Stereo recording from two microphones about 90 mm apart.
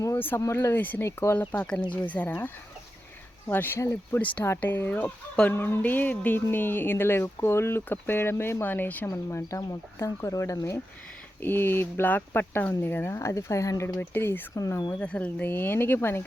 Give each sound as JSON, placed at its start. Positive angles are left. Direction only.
{"t": 0.2, "sound": "speech", "side_deg": 25}
{"t": 1.0, "sound": "speech", "side_deg": 30}
{"t": 1.9, "sound": "speech", "side_deg": 15}
{"t": 9.0, "sound": "speech", "side_deg": 35}
{"t": 11.4, "sound": "speech", "side_deg": 25}
{"t": 14.5, "sound": "speech", "side_deg": 40}
{"t": 14.9, "sound": "speech", "side_deg": 15}